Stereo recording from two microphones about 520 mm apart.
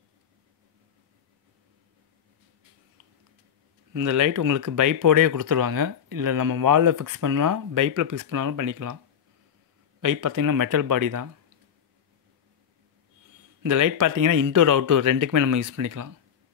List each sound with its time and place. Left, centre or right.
3.9 s speech: right
10.0 s speech: right
13.6 s speech: right